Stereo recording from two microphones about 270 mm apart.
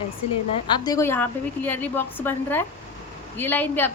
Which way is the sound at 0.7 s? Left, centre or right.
Centre.